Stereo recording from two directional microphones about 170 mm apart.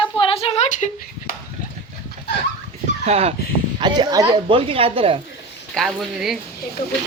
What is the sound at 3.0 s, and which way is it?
Speech, 35° right (ahead or behind).